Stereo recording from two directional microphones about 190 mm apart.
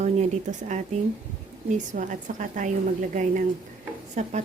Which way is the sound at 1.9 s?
45° right (ahead or behind).